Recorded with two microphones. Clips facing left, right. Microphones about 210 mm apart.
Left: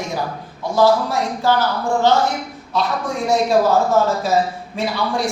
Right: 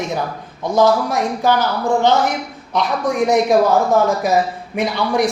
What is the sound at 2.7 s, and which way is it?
A man's voice, 15° right (ahead or behind).